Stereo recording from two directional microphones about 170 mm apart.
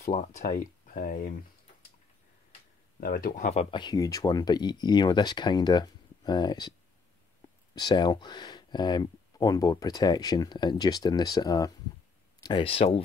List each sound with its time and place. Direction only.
0.0 s speech: 45° left (ahead or behind)
3.0 s speech: 60° left (ahead or behind)
3.7 s speech: 25° left (ahead or behind)
7.7 s speech: 25° left (ahead or behind)